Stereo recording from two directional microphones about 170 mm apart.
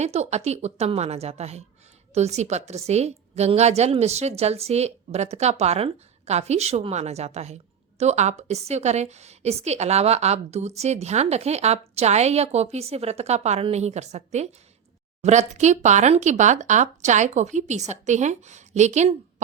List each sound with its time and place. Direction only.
0.0 s a woman's voice: 40° right (ahead or behind)